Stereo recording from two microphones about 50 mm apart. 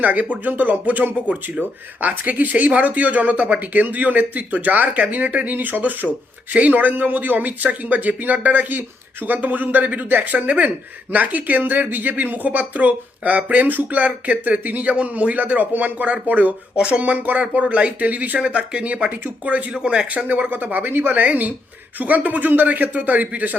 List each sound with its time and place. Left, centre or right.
0.0 s speech: right
16.7 s speech: centre
17.0 s speech: right
20.1 s speech: right